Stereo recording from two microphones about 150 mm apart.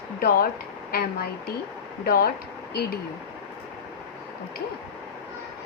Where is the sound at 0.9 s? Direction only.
80° left.